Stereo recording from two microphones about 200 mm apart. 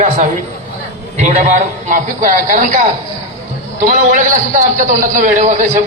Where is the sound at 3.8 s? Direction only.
40° right (ahead or behind).